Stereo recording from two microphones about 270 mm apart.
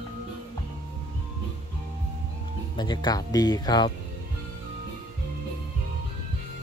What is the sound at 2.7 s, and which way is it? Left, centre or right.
Speech, centre.